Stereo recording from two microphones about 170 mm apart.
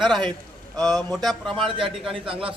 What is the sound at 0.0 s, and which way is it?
Speech, 25° right (ahead or behind).